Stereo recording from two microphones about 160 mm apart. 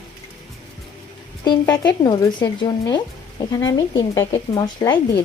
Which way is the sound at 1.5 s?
25° left (ahead or behind).